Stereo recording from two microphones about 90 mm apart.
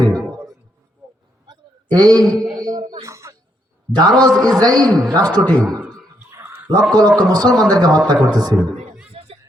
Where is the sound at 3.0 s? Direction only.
35° right (ahead or behind).